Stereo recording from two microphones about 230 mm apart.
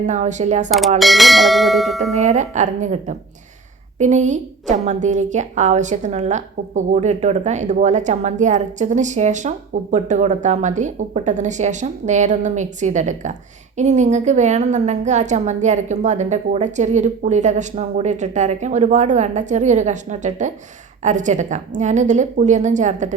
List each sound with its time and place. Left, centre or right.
0.0 s a woman's voice: right
0.9 s speech: centre
2.1 s a woman's voice: right